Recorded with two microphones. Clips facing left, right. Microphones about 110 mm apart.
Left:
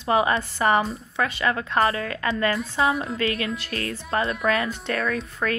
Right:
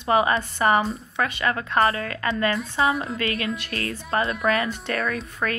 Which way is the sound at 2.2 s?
Centre (ahead or behind).